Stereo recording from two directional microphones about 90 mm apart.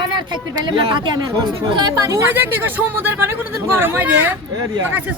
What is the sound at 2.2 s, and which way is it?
Speech, 20° right (ahead or behind).